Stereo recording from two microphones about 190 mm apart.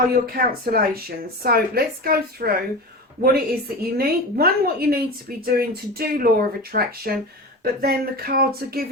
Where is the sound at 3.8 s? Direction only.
55° right (ahead or behind).